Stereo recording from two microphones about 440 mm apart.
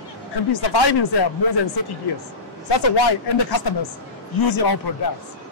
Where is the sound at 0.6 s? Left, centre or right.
Left.